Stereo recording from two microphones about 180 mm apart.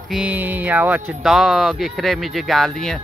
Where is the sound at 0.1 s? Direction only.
5° right (ahead or behind).